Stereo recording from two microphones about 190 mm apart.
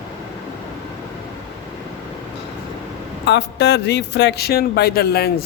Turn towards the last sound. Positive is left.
turn(degrees=55)  # may be behind; listen again after turning